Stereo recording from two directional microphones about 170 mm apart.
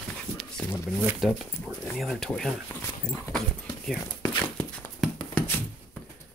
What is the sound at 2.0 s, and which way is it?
Speech, centre (ahead or behind).